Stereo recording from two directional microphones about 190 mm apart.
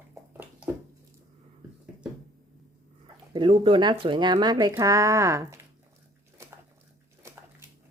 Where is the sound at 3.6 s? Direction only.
25° right (ahead or behind).